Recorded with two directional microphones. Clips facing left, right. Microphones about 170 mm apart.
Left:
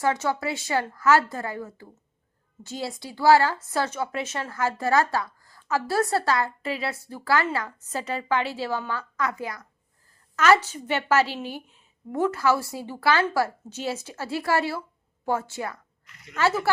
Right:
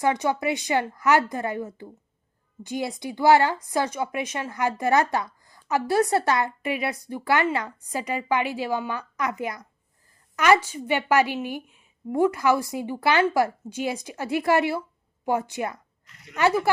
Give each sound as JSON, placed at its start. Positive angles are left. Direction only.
{"t": 0.0, "sound": "a woman's voice", "side_deg": -15}